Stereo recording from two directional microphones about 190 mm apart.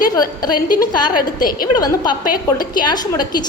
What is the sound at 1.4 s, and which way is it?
Speech, 50° left (ahead or behind).